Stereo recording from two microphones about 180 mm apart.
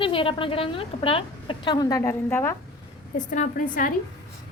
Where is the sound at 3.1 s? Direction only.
45° left (ahead or behind).